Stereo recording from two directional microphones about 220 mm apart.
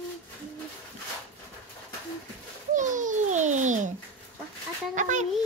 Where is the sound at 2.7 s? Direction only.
35° right (ahead or behind).